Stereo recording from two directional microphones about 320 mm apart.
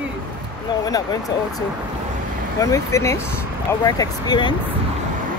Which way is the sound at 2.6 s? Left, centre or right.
Centre.